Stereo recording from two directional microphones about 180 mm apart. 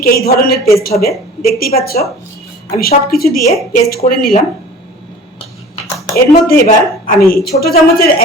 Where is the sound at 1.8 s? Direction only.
55° left (ahead or behind).